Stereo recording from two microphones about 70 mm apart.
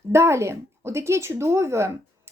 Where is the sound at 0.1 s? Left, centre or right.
Right.